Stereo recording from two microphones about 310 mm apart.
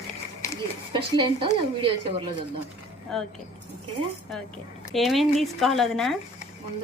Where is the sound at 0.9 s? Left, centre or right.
Centre.